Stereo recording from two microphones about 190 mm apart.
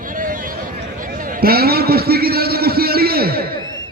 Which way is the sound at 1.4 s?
55° right (ahead or behind).